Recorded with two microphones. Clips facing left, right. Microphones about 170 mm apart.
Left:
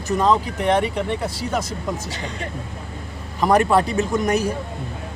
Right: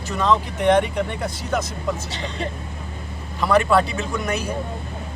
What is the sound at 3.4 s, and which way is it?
Speech, 40° left (ahead or behind).